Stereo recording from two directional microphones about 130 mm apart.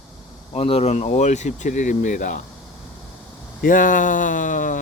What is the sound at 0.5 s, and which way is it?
Speech, 50° left (ahead or behind).